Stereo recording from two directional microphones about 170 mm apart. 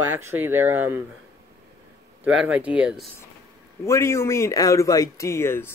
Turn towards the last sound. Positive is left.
turn(degrees=15)  # may be behind; listen again after turning